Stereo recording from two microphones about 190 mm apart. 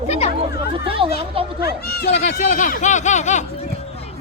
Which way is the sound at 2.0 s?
35° left (ahead or behind).